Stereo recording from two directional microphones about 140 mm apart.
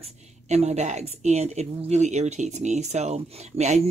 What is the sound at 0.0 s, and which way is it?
A woman's voice, 50° right (ahead or behind).